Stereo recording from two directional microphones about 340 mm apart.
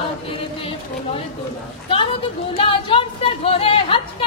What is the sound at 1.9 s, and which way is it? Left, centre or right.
Speech, centre.